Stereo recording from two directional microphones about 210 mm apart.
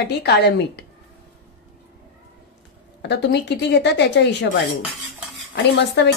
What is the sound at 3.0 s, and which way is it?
A woman's voice, 55° left (ahead or behind).